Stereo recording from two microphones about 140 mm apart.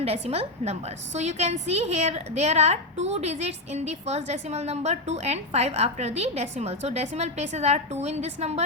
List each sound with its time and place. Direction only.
0.0 s a woman's voice: 45° right (ahead or behind)